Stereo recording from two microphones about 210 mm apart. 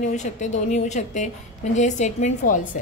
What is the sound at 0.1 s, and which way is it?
A woman's voice, 35° left (ahead or behind).